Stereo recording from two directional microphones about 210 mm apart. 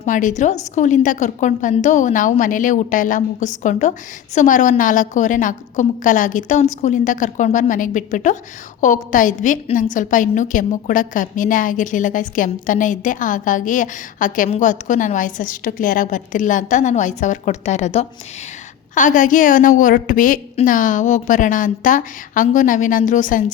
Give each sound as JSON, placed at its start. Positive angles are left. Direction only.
{"t": 0.0, "sound": "a woman's voice", "side_deg": 35}